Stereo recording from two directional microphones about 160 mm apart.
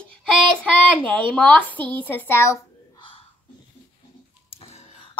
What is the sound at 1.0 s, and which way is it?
A child's voice, 5° left (ahead or behind).